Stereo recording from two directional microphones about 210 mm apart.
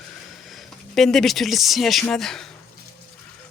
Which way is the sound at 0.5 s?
Centre (ahead or behind).